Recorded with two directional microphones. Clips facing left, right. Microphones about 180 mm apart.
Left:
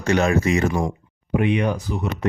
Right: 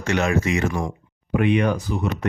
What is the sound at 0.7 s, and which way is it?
Speech, 20° left (ahead or behind).